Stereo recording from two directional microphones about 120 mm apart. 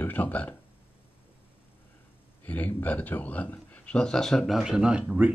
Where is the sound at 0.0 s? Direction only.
15° left (ahead or behind).